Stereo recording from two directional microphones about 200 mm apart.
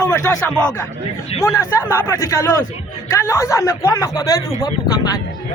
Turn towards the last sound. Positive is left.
turn(degrees=20)  # may be behind; listen again after turning